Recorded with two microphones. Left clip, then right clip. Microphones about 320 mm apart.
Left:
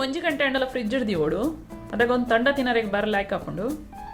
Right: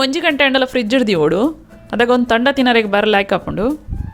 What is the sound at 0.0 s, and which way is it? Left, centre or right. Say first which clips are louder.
Speech: right 10 dB; right.